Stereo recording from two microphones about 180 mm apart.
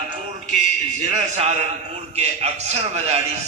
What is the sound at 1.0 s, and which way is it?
A man's voice, 40° right (ahead or behind).